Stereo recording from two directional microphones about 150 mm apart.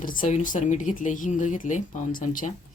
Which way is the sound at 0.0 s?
65° left (ahead or behind).